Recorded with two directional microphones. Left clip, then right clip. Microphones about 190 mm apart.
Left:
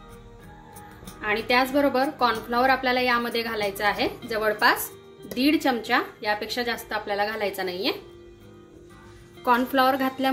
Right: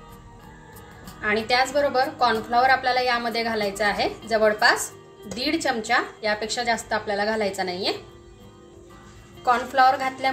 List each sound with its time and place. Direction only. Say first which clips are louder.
1.2 s a woman's voice: right 1 dB; 45° left (ahead or behind)
9.4 s a woman's voice: right 2 dB; 45° left (ahead or behind)